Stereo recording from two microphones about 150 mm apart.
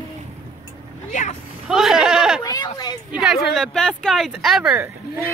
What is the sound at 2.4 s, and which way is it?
Speech, 25° left (ahead or behind).